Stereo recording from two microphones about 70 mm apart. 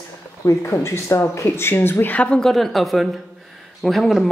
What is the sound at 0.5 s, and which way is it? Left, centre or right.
Speech, left.